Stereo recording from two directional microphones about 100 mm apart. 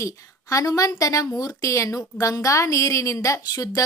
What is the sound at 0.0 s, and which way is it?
Speech, 35° left (ahead or behind).